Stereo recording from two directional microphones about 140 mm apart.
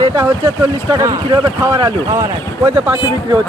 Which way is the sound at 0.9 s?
20° right (ahead or behind).